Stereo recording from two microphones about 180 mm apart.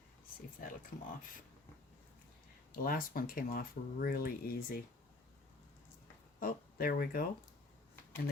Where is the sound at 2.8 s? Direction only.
55° left (ahead or behind).